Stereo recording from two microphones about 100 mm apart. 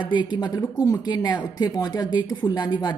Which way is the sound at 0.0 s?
50° left (ahead or behind).